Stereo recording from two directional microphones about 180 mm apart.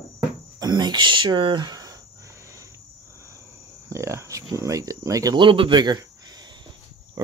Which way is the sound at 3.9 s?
15° right (ahead or behind).